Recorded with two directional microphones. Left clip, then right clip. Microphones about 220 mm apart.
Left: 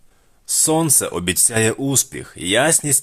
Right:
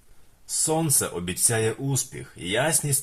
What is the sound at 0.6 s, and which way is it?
Speech, 40° left (ahead or behind).